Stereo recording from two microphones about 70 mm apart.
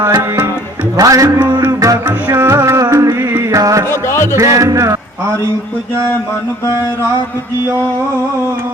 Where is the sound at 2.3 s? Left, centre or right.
Right.